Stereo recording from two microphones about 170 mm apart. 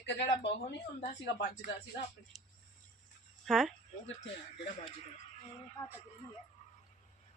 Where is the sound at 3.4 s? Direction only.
Centre (ahead or behind).